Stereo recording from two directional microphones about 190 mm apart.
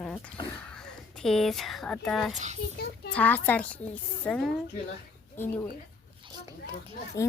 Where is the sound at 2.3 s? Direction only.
40° right (ahead or behind).